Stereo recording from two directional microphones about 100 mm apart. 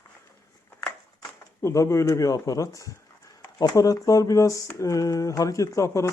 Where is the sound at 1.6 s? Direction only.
30° left (ahead or behind).